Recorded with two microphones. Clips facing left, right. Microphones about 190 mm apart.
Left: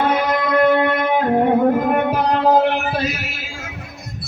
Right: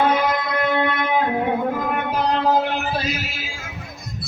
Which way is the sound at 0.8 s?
50° left (ahead or behind).